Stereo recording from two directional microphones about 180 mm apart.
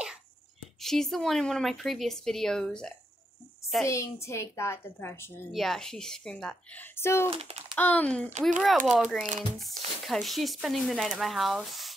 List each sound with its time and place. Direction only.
0.7 s speech: centre (ahead or behind)
3.8 s a woman's voice: 15° left (ahead or behind)
5.5 s speech: centre (ahead or behind)
7.2 s speech: 35° right (ahead or behind)
7.7 s a woman's voice: 10° left (ahead or behind)
8.3 s speech: 40° right (ahead or behind)
8.5 s speech: centre (ahead or behind)